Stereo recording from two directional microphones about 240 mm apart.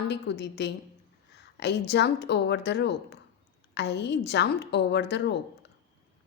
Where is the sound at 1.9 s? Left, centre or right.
Left.